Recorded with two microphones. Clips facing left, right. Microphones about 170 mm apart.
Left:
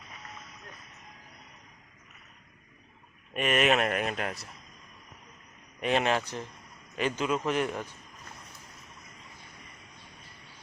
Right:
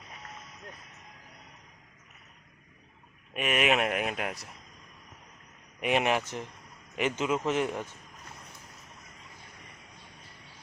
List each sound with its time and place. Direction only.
3.3 s speech: 5° right (ahead or behind)
5.8 s a man's voice: 15° right (ahead or behind)